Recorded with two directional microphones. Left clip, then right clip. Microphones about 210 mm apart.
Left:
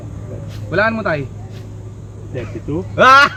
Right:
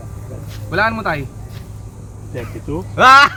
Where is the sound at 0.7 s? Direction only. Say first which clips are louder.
Left 1 dB; 40° right (ahead or behind).